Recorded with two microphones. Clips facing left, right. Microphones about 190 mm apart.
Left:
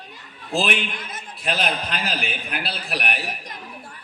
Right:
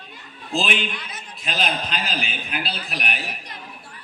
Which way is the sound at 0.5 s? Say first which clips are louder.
Left 1 dB; 60° left (ahead or behind).